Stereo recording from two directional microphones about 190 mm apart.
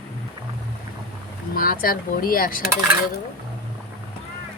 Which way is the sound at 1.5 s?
45° left (ahead or behind).